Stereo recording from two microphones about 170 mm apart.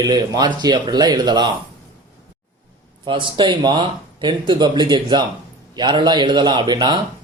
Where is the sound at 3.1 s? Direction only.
30° right (ahead or behind).